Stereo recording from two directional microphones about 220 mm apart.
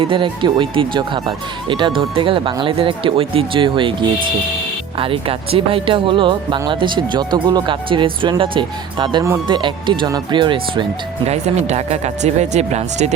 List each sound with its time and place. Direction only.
0.0 s speech: 20° right (ahead or behind)
4.9 s speech: 25° right (ahead or behind)